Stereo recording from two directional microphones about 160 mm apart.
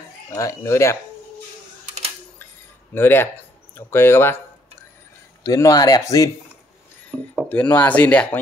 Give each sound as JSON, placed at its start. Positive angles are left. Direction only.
{"t": 0.3, "sound": "speech", "side_deg": 20}
{"t": 2.9, "sound": "speech", "side_deg": 15}
{"t": 5.4, "sound": "speech", "side_deg": 20}
{"t": 7.1, "sound": "speech", "side_deg": 5}